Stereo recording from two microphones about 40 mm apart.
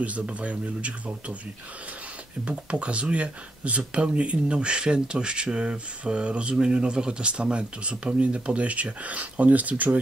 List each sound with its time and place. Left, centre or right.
0.0 s speech: right
2.4 s speech: right